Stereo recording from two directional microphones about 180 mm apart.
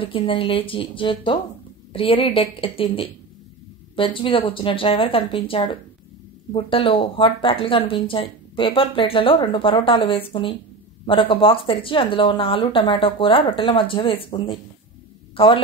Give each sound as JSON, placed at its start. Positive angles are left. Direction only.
{"t": 0.0, "sound": "a woman's voice", "side_deg": 30}